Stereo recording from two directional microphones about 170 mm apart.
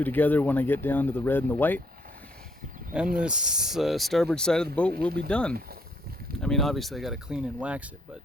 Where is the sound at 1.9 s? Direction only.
60° right (ahead or behind).